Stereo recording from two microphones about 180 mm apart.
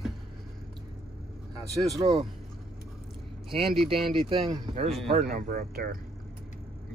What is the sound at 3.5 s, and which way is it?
Speech, 30° right (ahead or behind).